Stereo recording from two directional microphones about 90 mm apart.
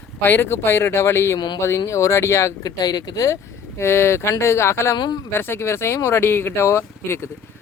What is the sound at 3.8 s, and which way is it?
Speech, 30° left (ahead or behind).